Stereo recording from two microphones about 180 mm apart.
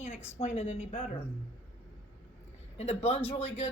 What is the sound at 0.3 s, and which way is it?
Speech, 35° left (ahead or behind).